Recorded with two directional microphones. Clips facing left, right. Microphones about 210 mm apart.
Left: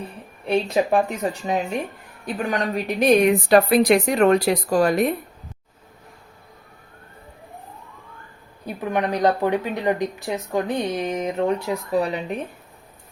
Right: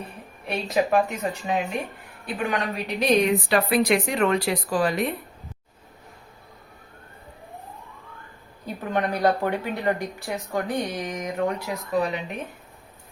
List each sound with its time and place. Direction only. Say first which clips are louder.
0.4 s a woman's voice: left 4 dB; 30° left (ahead or behind)
8.6 s speech: left 2 dB; 15° left (ahead or behind); by 12.4 s 35° left (ahead or behind)